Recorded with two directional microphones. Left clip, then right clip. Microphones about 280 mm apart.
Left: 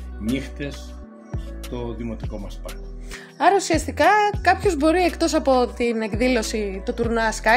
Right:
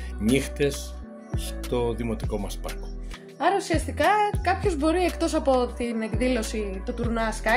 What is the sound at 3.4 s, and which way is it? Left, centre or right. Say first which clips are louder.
A woman's voice: left 6 dB; left.